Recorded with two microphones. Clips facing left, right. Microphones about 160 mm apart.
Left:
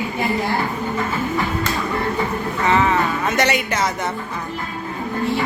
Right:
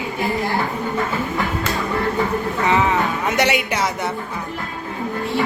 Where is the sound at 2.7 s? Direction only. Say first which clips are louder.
Left 1 dB; 20° right (ahead or behind).